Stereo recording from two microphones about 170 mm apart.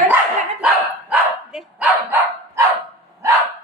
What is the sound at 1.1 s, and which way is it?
Dog, 5° right (ahead or behind).